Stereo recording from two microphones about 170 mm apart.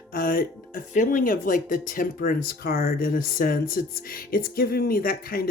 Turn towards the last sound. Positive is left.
turn(degrees=60)  # may be behind; listen again after turning